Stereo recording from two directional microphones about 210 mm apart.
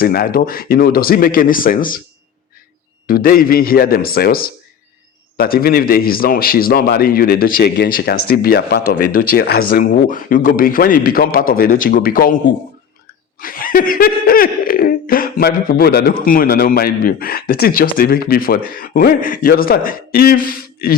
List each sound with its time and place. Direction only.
0.0 s laughter: 45° left (ahead or behind)
3.1 s laughter: 45° left (ahead or behind)
13.4 s laughter: 40° left (ahead or behind)